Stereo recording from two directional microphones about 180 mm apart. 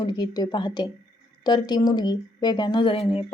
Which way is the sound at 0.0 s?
25° left (ahead or behind).